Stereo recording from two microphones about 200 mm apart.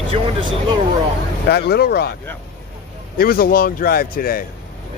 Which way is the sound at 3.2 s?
45° left (ahead or behind).